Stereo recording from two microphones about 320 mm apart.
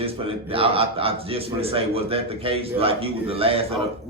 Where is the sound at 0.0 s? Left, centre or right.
Centre.